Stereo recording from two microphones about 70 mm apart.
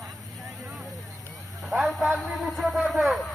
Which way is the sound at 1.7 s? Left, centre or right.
Centre.